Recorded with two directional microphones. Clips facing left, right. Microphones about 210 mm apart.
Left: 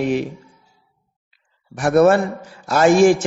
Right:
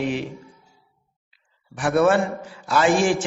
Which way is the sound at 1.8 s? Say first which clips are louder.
Left 5 dB; 40° left (ahead or behind).